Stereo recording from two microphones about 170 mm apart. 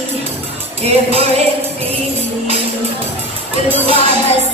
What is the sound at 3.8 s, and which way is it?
Music, 35° right (ahead or behind).